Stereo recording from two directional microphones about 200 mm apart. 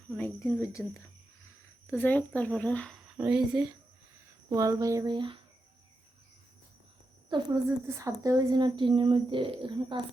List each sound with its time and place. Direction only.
0.2 s speech: 10° left (ahead or behind); by 3.6 s 5° right (ahead or behind)
4.4 s speech: 15° right (ahead or behind)
7.3 s a woman's voice: 20° right (ahead or behind)